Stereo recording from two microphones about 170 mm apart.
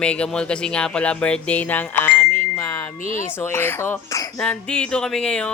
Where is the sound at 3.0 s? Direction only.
50° left (ahead or behind).